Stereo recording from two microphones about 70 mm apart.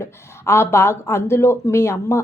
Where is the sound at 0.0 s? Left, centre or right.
Left.